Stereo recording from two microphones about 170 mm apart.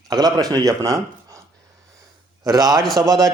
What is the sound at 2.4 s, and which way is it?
Speech, 25° right (ahead or behind).